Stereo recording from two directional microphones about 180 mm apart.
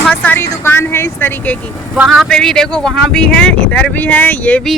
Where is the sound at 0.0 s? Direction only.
5° left (ahead or behind).